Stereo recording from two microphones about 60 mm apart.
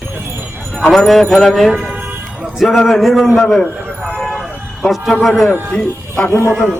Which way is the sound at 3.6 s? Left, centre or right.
Left.